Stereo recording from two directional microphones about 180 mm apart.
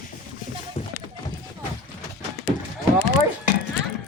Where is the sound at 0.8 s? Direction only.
35° left (ahead or behind).